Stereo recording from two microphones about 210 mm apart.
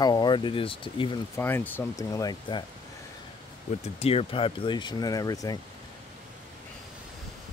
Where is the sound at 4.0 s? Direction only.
30° left (ahead or behind).